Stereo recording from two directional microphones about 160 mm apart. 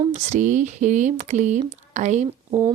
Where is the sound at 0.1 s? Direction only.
50° right (ahead or behind).